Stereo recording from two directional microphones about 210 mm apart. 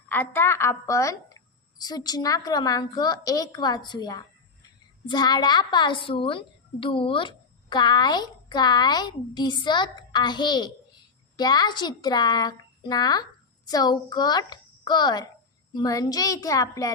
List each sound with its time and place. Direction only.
0.1 s a woman's voice: 10° left (ahead or behind)